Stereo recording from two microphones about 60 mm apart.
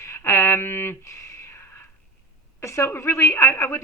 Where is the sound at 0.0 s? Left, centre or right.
Left.